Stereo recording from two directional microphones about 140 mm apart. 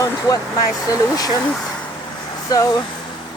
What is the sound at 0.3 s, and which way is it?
Speech, 30° left (ahead or behind).